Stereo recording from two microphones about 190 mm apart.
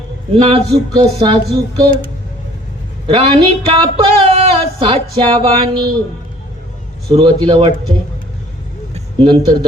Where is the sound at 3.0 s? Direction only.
30° right (ahead or behind).